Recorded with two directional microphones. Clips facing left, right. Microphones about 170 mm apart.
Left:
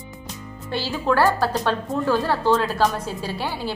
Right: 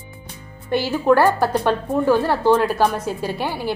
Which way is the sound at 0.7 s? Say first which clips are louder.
Right 6 dB; 15° right (ahead or behind).